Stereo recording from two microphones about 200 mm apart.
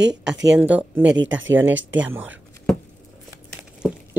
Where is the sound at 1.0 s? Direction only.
65° right (ahead or behind).